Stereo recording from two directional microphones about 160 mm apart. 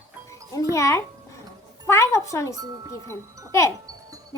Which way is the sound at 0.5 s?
20° left (ahead or behind).